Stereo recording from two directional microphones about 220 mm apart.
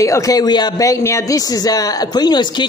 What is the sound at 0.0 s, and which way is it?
Speech, 15° left (ahead or behind).